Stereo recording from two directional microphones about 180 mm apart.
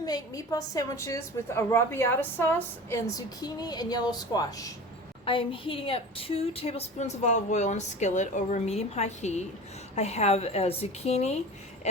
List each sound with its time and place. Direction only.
0.0 s a woman's voice: 20° left (ahead or behind); by 11.3 s 35° left (ahead or behind)